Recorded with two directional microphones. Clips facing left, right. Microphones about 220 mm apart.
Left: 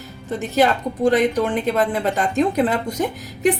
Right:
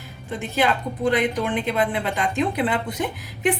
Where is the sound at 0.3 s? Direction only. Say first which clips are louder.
Left 4 dB; 40° left (ahead or behind).